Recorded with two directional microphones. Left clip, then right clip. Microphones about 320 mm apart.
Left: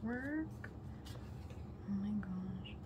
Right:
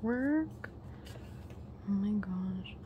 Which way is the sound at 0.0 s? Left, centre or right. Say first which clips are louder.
Right 9 dB; centre.